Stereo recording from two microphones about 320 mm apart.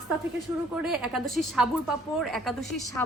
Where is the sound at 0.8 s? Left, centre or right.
Centre.